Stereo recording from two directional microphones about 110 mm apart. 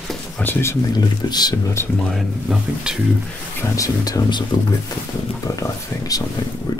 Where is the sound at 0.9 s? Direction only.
40° left (ahead or behind).